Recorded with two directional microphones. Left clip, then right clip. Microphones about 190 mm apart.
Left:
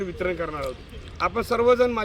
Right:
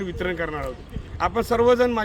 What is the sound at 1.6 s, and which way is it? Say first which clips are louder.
Speech: even; 30° right (ahead or behind).